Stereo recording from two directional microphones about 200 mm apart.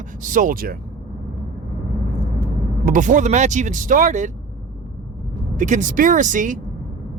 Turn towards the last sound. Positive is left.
turn(degrees=-40)  # may be behind; listen again after turning